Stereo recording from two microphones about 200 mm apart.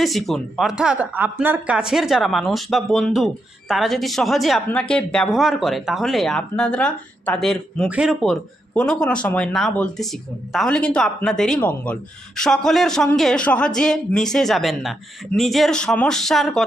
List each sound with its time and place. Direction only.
0.0 s speech: centre (ahead or behind)